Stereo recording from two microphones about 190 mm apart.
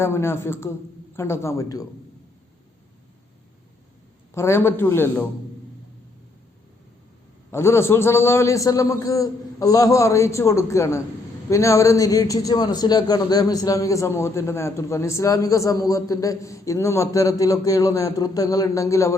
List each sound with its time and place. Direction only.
0.0 s a man's voice: 15° left (ahead or behind)
4.4 s a man's voice: 15° left (ahead or behind)
7.5 s a man's voice: 15° left (ahead or behind)